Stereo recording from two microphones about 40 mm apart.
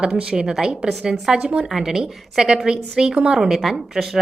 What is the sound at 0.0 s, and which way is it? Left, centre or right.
A woman's voice, right.